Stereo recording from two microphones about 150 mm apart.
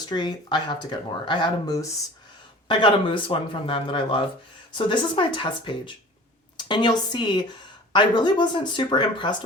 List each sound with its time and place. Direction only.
0.0 s speech: 30° left (ahead or behind)